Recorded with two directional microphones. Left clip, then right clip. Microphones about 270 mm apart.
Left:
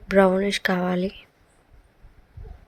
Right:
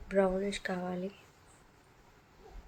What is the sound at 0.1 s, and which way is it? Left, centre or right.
Speech, left.